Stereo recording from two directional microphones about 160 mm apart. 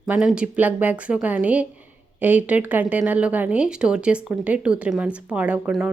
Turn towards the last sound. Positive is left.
turn(degrees=-5)  # may be behind; listen again after turning